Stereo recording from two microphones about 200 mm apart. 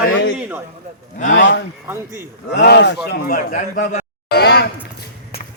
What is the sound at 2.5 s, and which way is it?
A man's voice, 55° left (ahead or behind).